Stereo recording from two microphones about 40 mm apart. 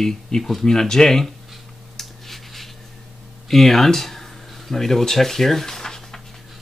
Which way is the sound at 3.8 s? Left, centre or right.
Centre.